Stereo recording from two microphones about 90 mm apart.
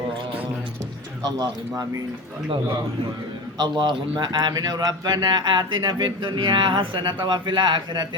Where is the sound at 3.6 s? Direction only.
55° right (ahead or behind).